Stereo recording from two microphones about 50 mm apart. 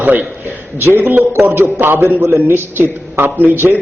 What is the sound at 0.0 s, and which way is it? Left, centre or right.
A man's voice, right.